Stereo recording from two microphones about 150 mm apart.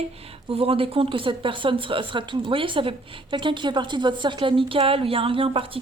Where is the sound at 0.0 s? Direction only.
40° right (ahead or behind).